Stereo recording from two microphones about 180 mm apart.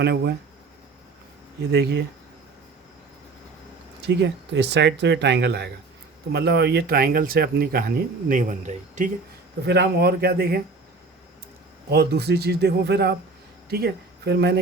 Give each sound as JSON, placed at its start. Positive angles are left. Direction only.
{"t": 0.0, "sound": "speech", "side_deg": -65}
{"t": 1.7, "sound": "speech", "side_deg": -65}
{"t": 4.0, "sound": "speech", "side_deg": -70}
{"t": 9.6, "sound": "speech", "side_deg": -70}
{"t": 11.9, "sound": "speech", "side_deg": -65}